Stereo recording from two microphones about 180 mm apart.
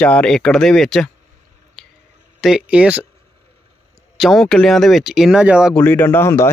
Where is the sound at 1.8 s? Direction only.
Centre (ahead or behind).